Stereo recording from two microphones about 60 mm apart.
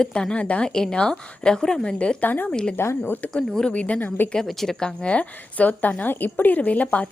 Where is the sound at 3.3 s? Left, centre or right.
Centre.